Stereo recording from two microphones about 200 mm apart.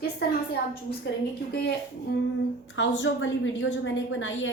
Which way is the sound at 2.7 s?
65° left (ahead or behind).